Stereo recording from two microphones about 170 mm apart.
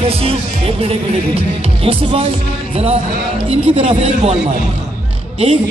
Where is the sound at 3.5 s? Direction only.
35° right (ahead or behind).